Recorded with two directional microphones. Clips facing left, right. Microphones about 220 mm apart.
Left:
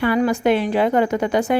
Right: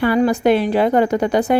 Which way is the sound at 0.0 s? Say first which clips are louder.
Right 3 dB; 35° right (ahead or behind).